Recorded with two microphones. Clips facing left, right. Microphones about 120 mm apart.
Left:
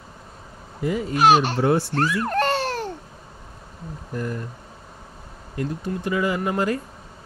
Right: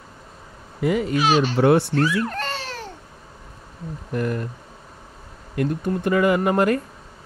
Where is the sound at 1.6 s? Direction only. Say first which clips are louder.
Right 4 dB; 70° right (ahead or behind).